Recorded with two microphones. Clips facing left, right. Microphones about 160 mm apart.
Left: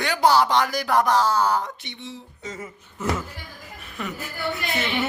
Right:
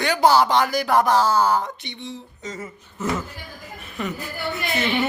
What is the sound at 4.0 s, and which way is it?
Speech, centre (ahead or behind).